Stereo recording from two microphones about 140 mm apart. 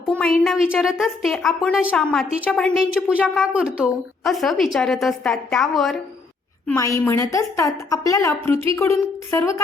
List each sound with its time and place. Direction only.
0.1 s a woman's voice: 5° left (ahead or behind)
2.3 s a woman's voice: 10° right (ahead or behind)
2.6 s a woman's voice: 5° left (ahead or behind)
2.8 s a woman's voice: 10° right (ahead or behind)
6.7 s a woman's voice: 20° left (ahead or behind)